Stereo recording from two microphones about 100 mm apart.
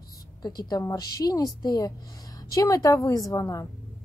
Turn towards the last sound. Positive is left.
turn(degrees=35)  # may be behind; listen again after turning